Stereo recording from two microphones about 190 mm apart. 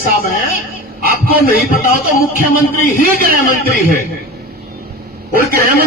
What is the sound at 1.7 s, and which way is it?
A man's voice, 45° left (ahead or behind).